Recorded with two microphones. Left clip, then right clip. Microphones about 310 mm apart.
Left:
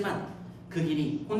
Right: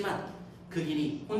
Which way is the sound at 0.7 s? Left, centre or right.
Centre.